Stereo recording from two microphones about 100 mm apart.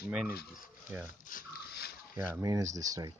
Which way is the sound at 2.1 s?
20° right (ahead or behind).